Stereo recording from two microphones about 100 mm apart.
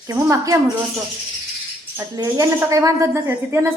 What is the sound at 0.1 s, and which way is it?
Speech, 35° right (ahead or behind).